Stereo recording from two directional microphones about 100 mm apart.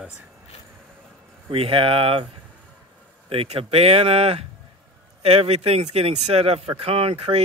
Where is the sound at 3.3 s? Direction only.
75° right (ahead or behind).